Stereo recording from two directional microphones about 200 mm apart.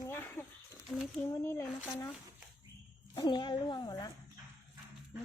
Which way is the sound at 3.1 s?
20° left (ahead or behind).